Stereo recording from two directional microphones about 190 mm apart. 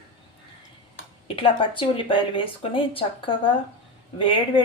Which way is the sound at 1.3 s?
25° left (ahead or behind).